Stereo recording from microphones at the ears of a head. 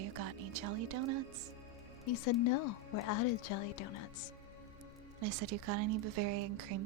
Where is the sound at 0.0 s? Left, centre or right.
Right.